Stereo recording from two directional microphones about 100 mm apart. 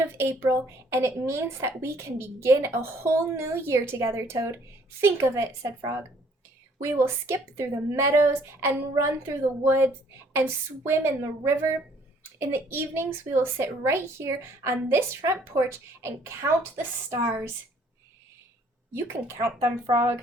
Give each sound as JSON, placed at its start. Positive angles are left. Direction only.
{"t": 0.0, "sound": "a woman's voice", "side_deg": -25}
{"t": 18.9, "sound": "a woman's voice", "side_deg": -25}